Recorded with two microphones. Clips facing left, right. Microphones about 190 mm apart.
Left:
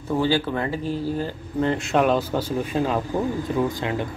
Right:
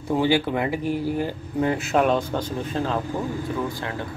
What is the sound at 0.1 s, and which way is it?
Speech, 15° right (ahead or behind).